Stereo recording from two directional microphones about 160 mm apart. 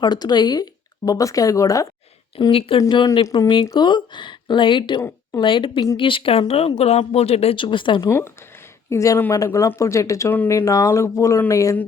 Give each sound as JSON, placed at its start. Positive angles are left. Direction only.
{"t": 0.0, "sound": "speech", "side_deg": 25}
{"t": 2.3, "sound": "speech", "side_deg": 35}
{"t": 2.8, "sound": "speech", "side_deg": 25}
{"t": 4.9, "sound": "speech", "side_deg": 15}
{"t": 5.4, "sound": "speech", "side_deg": 30}
{"t": 8.9, "sound": "speech", "side_deg": 20}